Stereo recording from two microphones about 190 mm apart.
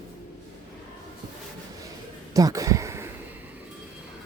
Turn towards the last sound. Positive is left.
turn(degrees=-15)  # may be behind; listen again after turning